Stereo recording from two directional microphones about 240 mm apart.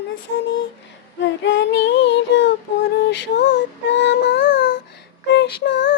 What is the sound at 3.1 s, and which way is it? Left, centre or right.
Female singing, left.